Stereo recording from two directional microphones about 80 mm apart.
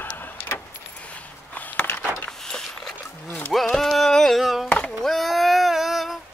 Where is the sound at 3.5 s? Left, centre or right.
Centre.